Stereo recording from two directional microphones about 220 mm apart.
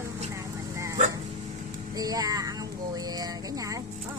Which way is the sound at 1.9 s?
15° right (ahead or behind).